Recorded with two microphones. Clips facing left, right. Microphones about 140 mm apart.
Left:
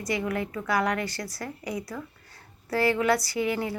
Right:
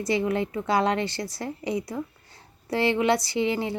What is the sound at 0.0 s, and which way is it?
Speech, 25° right (ahead or behind).